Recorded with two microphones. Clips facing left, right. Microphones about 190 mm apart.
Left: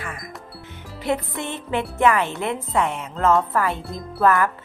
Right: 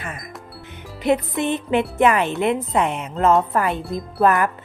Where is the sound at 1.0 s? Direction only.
20° right (ahead or behind).